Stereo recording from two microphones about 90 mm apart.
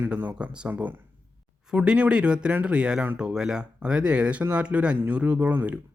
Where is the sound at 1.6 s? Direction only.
10° right (ahead or behind).